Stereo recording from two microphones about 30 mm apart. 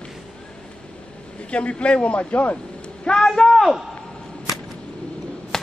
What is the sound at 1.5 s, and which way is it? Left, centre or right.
Speech, left.